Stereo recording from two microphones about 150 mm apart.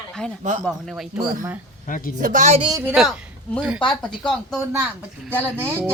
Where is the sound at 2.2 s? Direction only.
60° right (ahead or behind).